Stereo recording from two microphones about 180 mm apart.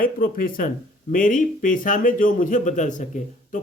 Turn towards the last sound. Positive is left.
turn(degrees=45)  # may be behind; listen again after turning